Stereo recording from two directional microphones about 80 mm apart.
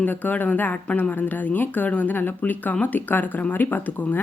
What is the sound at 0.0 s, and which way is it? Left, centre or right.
Speech, left.